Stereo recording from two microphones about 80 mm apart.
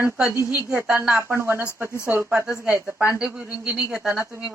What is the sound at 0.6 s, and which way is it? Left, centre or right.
Speech, right.